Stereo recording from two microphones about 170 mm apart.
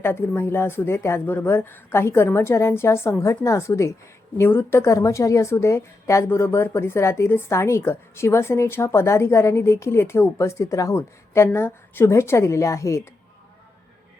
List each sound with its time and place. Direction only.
0.0 s speech: 15° left (ahead or behind)